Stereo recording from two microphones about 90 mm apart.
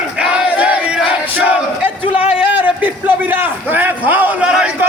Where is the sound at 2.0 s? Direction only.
90° left.